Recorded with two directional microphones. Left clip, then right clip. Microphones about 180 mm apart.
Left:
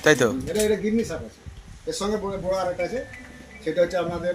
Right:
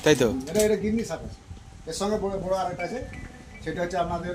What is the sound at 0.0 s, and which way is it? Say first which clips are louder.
Speech: left 2 dB; 20° right (ahead or behind).